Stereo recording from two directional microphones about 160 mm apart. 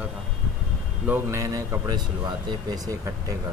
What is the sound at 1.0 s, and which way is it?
Speech, 15° right (ahead or behind).